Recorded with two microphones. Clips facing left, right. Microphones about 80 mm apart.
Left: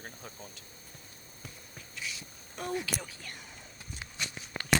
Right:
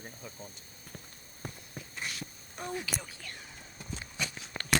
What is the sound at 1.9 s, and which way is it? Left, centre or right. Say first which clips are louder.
Dog: right 1 dB; right.